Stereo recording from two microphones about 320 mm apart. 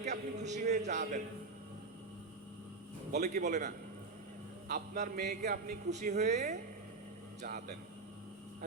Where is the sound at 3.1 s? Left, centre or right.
Right.